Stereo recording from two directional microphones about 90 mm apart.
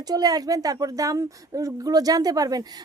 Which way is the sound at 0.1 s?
45° right (ahead or behind).